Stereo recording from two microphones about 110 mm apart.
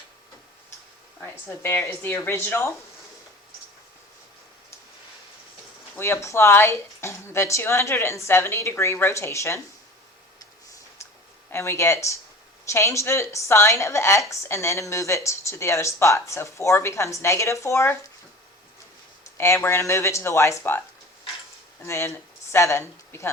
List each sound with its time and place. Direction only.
1.2 s a woman's voice: 20° left (ahead or behind)
6.0 s a woman's voice: 25° left (ahead or behind)
11.5 s a woman's voice: 25° left (ahead or behind)
19.2 s a woman's voice: 25° left (ahead or behind)
21.8 s speech: 25° left (ahead or behind)